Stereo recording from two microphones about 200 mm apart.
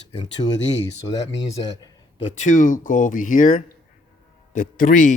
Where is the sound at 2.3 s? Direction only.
40° left (ahead or behind).